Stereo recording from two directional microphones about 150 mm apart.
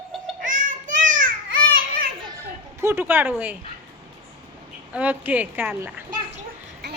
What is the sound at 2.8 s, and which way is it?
Speech, 15° right (ahead or behind).